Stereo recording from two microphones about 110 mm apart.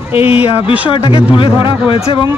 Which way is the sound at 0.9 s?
50° left (ahead or behind).